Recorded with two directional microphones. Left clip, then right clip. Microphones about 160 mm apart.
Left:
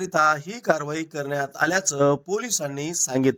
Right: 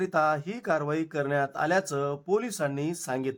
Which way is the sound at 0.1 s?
45° left (ahead or behind).